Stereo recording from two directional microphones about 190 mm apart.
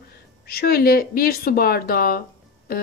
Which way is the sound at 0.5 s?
55° left (ahead or behind).